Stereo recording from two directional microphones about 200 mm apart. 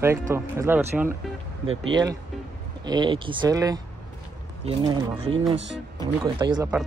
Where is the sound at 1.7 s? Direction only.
70° right (ahead or behind).